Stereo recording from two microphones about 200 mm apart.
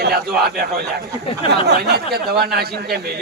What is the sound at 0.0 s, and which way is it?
Speech, 50° right (ahead or behind).